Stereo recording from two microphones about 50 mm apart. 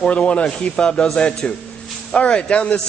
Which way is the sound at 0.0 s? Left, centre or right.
Left.